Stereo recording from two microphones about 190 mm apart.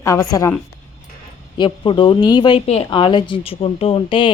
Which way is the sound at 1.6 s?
25° left (ahead or behind).